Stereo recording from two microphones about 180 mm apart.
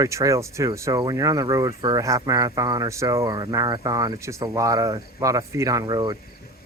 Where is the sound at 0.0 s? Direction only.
15° right (ahead or behind).